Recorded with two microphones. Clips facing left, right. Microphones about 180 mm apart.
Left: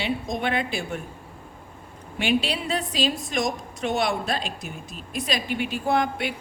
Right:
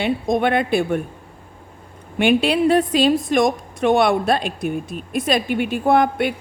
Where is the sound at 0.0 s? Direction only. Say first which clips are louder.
Right 8 dB; 55° right (ahead or behind).